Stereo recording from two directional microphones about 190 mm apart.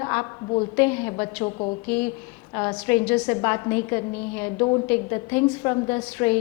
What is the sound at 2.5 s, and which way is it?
A woman's voice, 15° left (ahead or behind).